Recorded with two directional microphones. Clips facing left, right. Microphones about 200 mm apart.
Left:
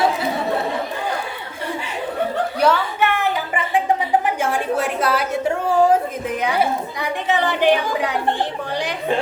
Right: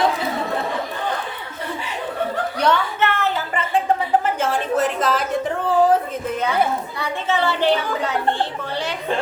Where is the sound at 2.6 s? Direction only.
5° left (ahead or behind).